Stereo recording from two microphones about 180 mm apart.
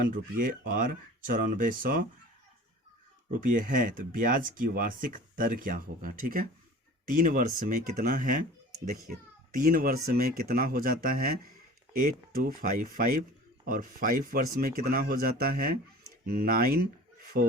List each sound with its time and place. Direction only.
0.0 s speech: 50° right (ahead or behind)
3.4 s speech: 50° right (ahead or behind)
9.5 s speech: 50° right (ahead or behind)
17.3 s speech: 70° right (ahead or behind)